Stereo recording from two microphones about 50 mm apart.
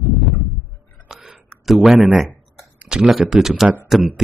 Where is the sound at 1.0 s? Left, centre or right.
Centre.